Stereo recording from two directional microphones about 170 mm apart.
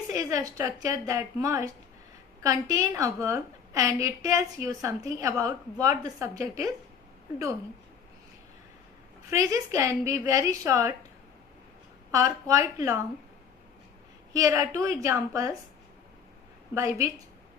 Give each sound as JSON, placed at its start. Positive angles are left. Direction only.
{"t": 0.1, "sound": "a woman's voice", "side_deg": -20}
{"t": 9.3, "sound": "a woman's voice", "side_deg": -20}
{"t": 12.1, "sound": "a woman's voice", "side_deg": -20}
{"t": 14.3, "sound": "a woman's voice", "side_deg": -20}
{"t": 16.7, "sound": "a woman's voice", "side_deg": -20}